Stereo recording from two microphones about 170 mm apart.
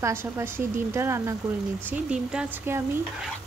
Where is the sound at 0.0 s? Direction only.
15° right (ahead or behind).